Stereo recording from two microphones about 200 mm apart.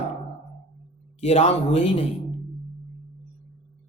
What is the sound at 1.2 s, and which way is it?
Speech, 35° left (ahead or behind).